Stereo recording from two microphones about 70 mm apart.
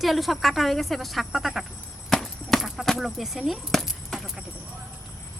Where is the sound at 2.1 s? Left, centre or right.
Centre.